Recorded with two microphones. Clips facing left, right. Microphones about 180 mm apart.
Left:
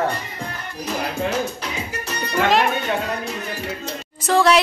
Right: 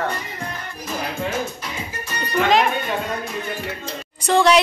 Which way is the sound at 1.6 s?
75° left (ahead or behind).